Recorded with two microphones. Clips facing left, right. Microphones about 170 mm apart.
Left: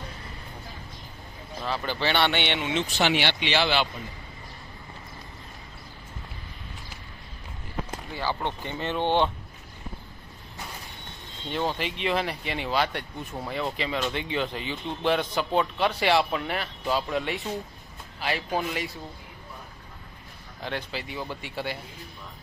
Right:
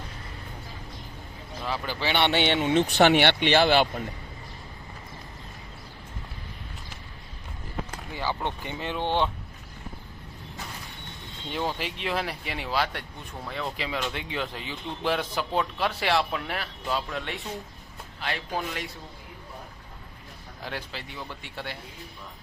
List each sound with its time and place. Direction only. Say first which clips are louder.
1.6 s speech: left 2 dB; 10° right (ahead or behind)
2.3 s speech: right 5 dB; 40° right (ahead or behind)
2.8 s speech: right 6 dB; 55° right (ahead or behind)
8.1 s speech: even; 15° right (ahead or behind)
11.5 s speech: left 2 dB; 5° right (ahead or behind)
20.7 s speech: left 4 dB; centre (ahead or behind)